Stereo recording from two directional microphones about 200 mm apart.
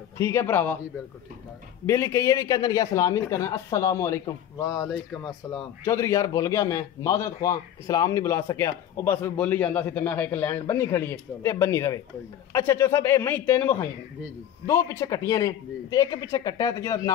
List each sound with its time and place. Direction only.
0.2 s a man's voice: 15° left (ahead or behind)
1.9 s a man's voice: 15° left (ahead or behind)